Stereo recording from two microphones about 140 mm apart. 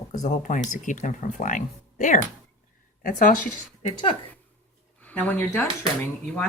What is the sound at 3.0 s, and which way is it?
Speech, 85° left.